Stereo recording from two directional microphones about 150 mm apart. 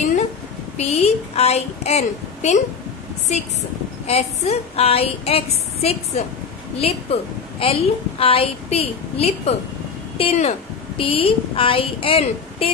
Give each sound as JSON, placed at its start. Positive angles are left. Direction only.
{"t": 0.7, "sound": "a woman's voice", "side_deg": 45}
{"t": 4.1, "sound": "a woman's voice", "side_deg": 45}